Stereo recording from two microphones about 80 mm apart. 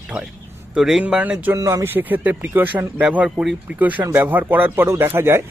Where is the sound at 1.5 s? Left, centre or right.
Right.